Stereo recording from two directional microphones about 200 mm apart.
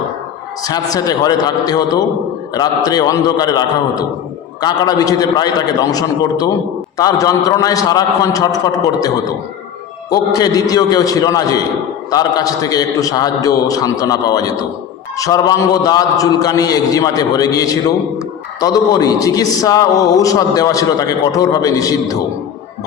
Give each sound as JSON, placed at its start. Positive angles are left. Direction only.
{"t": 0.6, "sound": "a man's voice", "side_deg": 20}